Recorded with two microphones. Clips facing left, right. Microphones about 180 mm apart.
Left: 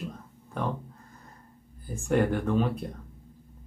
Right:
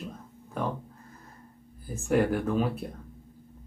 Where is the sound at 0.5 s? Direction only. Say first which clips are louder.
Even; 5° right (ahead or behind).